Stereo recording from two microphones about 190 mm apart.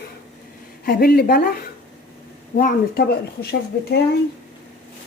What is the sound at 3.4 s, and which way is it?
Speech, 60° left (ahead or behind).